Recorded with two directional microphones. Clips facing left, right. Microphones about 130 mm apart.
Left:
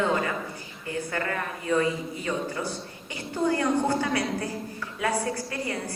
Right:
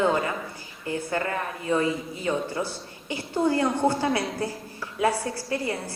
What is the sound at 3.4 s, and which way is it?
Speech, 30° right (ahead or behind).